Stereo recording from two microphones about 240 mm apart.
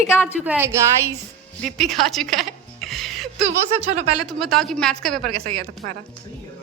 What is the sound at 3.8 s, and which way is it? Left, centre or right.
Speech, right.